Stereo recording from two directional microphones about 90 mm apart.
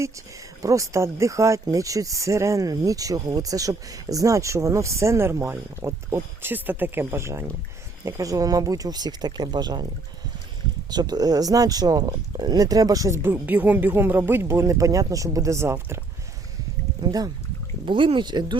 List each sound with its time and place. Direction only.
0.6 s speech: 35° right (ahead or behind)
10.9 s speech: 50° right (ahead or behind)
13.2 s speech: 20° right (ahead or behind)
17.0 s speech: 45° right (ahead or behind)
17.8 s speech: 65° right (ahead or behind)